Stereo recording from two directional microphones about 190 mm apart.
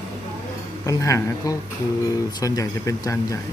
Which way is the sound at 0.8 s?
15° left (ahead or behind).